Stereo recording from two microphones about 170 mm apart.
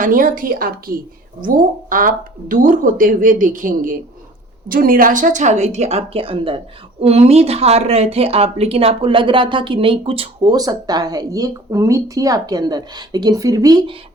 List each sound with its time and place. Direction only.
0.0 s a woman's voice: 50° right (ahead or behind); by 13.9 s 20° right (ahead or behind)